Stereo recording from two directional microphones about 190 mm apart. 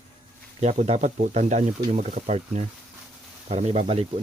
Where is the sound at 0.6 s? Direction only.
35° right (ahead or behind).